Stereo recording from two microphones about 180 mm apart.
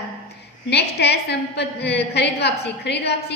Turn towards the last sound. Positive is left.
turn(degrees=65)  # may be behind; listen again after turning